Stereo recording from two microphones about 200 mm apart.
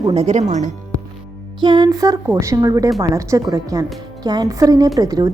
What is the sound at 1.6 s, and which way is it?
Speech, 20° right (ahead or behind).